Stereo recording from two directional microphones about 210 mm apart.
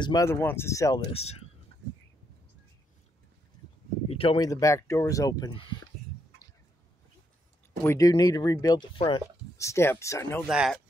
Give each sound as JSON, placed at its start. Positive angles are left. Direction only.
{"t": 0.0, "sound": "speech", "side_deg": 15}
{"t": 1.1, "sound": "speech", "side_deg": 30}
{"t": 1.7, "sound": "a sound", "side_deg": -60}
{"t": 4.1, "sound": "speech", "side_deg": 25}
{"t": 7.8, "sound": "speech", "side_deg": 15}
{"t": 9.6, "sound": "speech", "side_deg": 15}
{"t": 10.5, "sound": "speech", "side_deg": -5}